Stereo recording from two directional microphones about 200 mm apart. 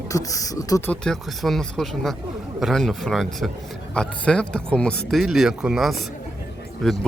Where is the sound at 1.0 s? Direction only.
Centre (ahead or behind).